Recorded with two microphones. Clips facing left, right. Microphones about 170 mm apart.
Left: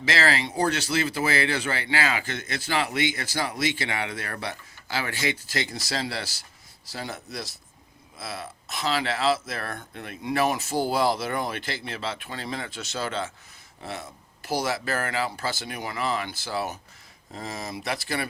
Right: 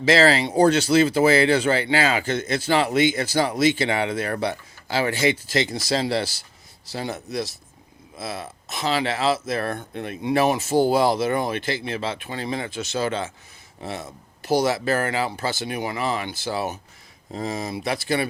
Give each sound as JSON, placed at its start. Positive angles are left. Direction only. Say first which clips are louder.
{"t": 0.0, "sound": "speech", "louder": "right 8 dB", "side_deg": -30}
{"t": 14.4, "sound": "speech", "louder": "right 7 dB", "side_deg": -20}